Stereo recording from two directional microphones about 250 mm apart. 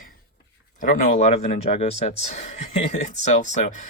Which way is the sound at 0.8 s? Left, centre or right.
Left.